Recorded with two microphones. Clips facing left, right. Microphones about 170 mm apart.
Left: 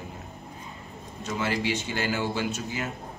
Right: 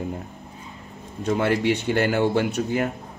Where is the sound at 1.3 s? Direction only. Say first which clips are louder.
Right 7 dB; 60° right (ahead or behind).